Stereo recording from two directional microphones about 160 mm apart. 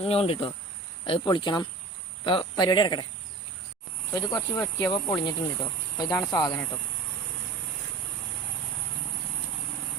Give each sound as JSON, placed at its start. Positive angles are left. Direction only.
{"t": 0.0, "sound": "speech", "side_deg": 35}
{"t": 4.1, "sound": "speech", "side_deg": 20}